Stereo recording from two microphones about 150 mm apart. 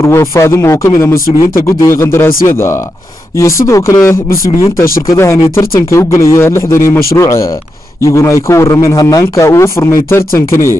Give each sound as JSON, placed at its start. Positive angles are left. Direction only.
{"t": 0.0, "sound": "speech", "side_deg": 20}